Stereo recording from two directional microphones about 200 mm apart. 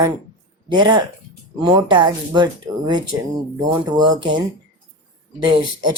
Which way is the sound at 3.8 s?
20° right (ahead or behind).